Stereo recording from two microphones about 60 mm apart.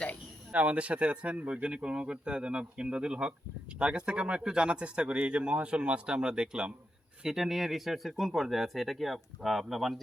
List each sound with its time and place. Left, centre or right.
0.5 s speech: right
7.3 s speech: centre